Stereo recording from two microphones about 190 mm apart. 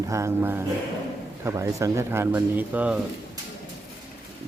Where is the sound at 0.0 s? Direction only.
15° right (ahead or behind).